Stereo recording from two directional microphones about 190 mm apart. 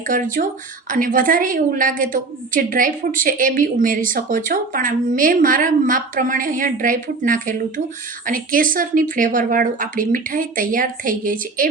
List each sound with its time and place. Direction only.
0.1 s a woman's voice: 45° right (ahead or behind)